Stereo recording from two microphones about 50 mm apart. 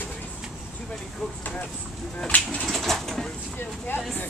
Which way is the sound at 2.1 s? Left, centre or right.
Left.